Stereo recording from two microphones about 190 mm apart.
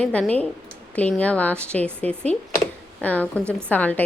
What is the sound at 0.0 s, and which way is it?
A woman's voice, 5° left (ahead or behind).